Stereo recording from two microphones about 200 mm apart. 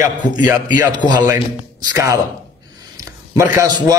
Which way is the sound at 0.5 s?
20° right (ahead or behind).